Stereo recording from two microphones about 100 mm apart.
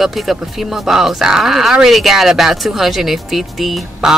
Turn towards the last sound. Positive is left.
turn(degrees=0)  # may be behind; listen again after turning